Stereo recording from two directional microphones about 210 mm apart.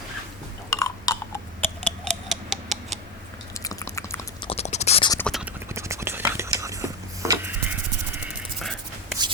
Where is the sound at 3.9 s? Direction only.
15° left (ahead or behind).